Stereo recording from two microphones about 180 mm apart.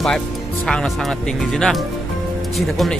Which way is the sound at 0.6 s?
Centre (ahead or behind).